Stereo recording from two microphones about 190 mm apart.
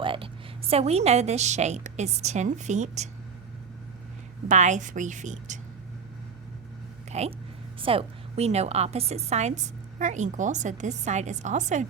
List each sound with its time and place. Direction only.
0.0 s a sound: 25° right (ahead or behind)
0.7 s a woman's voice: 35° right (ahead or behind)
4.4 s a woman's voice: 40° right (ahead or behind)
7.1 s a woman's voice: 35° right (ahead or behind)